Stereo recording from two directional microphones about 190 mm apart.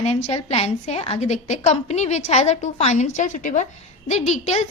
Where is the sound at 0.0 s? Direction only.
35° left (ahead or behind).